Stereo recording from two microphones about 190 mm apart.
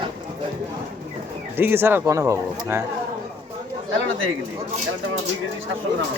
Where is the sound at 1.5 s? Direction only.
10° right (ahead or behind).